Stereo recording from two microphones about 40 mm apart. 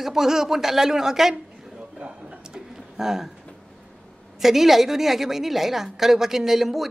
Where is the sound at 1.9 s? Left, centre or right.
Right.